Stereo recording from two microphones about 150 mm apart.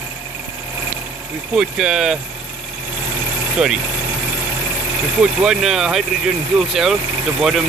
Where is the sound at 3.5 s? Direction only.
5° right (ahead or behind).